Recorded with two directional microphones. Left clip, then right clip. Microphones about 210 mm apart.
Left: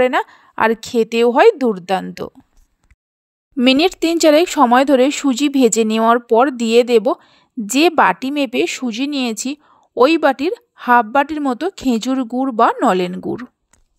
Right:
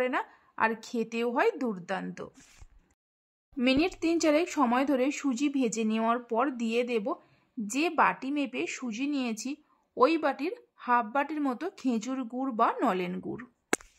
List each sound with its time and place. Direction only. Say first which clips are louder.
0.0 s speech: left 15 dB; 40° left (ahead or behind)
3.5 s speech: left 13 dB; 40° left (ahead or behind)